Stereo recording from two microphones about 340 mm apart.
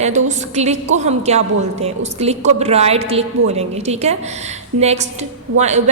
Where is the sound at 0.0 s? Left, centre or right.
Right.